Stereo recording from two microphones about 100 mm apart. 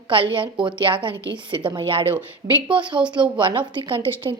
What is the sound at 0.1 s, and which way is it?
A woman's voice, 60° right (ahead or behind).